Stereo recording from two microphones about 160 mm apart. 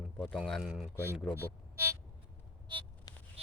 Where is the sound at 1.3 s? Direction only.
15° right (ahead or behind).